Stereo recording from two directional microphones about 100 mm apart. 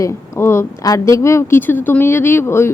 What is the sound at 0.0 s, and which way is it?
A woman's voice, 25° left (ahead or behind).